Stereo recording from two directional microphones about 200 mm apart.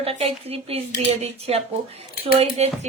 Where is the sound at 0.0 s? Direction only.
30° right (ahead or behind).